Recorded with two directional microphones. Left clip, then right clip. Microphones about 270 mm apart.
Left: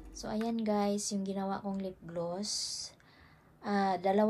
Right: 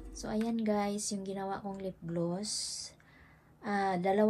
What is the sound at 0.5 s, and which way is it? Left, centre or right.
A woman's voice, centre.